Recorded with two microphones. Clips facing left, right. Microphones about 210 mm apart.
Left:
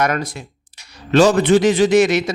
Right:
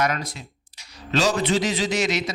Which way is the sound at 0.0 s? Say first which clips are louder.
Left 5 dB; 60° left (ahead or behind).